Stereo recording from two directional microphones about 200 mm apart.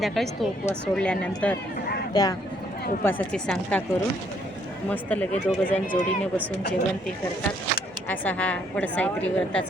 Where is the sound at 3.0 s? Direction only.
5° left (ahead or behind).